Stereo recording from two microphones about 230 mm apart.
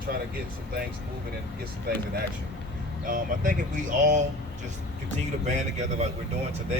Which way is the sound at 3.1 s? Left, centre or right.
Right.